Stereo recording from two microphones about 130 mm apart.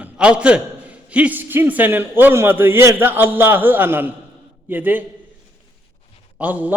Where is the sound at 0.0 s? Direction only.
10° right (ahead or behind).